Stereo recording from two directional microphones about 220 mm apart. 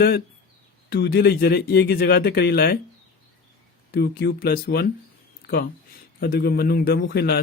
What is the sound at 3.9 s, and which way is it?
Speech, 50° left (ahead or behind).